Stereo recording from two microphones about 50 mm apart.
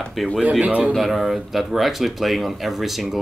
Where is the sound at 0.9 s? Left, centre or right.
Centre.